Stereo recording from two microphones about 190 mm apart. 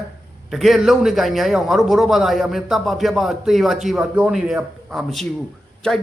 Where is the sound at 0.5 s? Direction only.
Centre (ahead or behind).